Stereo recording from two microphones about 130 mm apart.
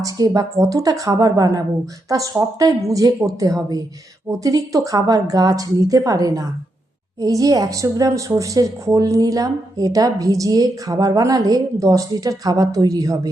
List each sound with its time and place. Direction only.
0.0 s a woman's voice: 30° right (ahead or behind)